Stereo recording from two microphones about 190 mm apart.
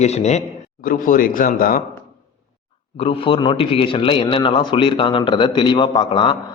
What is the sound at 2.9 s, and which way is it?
A man's voice, 30° left (ahead or behind).